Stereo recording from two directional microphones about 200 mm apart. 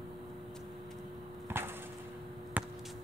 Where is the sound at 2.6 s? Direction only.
10° right (ahead or behind).